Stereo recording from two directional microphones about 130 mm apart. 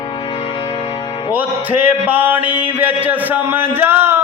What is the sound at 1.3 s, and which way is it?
Music, 15° right (ahead or behind).